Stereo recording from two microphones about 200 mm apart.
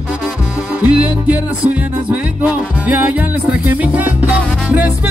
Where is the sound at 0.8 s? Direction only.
5° right (ahead or behind).